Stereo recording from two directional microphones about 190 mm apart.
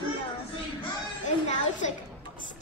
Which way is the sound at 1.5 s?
40° left (ahead or behind).